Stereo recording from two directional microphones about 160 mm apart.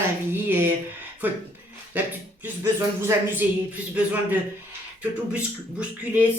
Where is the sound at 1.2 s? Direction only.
10° right (ahead or behind).